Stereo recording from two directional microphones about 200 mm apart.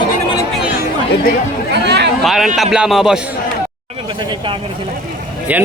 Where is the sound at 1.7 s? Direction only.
55° right (ahead or behind).